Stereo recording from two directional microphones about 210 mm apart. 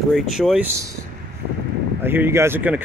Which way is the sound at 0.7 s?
15° right (ahead or behind).